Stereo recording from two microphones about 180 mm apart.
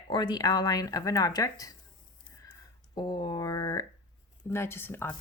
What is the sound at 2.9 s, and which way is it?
Speech, 25° left (ahead or behind).